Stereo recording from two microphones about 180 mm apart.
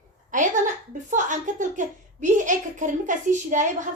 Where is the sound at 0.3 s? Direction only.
45° right (ahead or behind).